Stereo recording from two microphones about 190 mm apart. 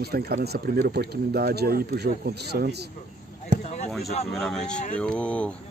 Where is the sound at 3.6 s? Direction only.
35° left (ahead or behind).